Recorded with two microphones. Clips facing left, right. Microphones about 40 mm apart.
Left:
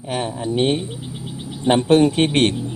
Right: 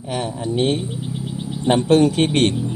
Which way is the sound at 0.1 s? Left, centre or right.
Left.